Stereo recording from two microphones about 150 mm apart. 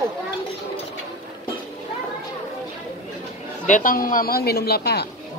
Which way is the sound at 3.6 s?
65° left (ahead or behind).